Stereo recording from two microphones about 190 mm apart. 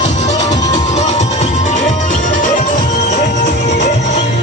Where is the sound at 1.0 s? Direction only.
35° left (ahead or behind).